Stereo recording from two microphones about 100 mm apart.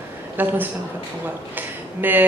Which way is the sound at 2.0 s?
20° right (ahead or behind).